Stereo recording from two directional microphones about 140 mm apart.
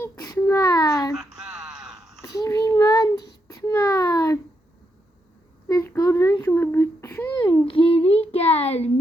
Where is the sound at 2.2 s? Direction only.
25° left (ahead or behind).